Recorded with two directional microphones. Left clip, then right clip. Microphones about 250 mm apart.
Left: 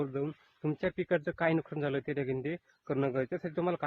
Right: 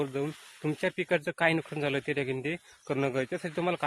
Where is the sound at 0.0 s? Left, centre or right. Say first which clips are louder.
Right 3 dB; centre.